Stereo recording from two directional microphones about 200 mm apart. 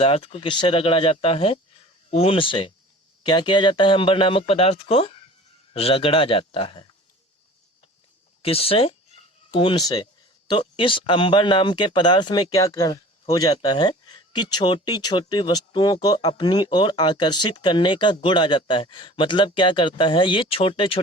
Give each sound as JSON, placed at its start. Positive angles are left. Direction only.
{"t": 0.0, "sound": "speech", "side_deg": 30}
{"t": 8.4, "sound": "speech", "side_deg": 30}